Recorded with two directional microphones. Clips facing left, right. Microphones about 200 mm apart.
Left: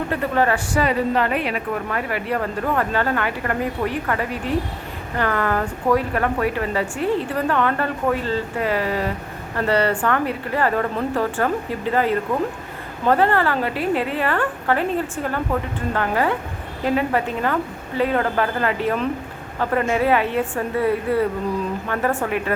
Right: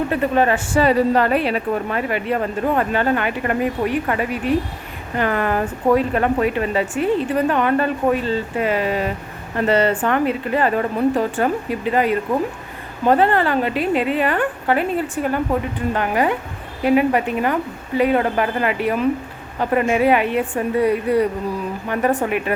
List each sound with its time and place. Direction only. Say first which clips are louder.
0.1 s a woman's voice: even; 20° right (ahead or behind)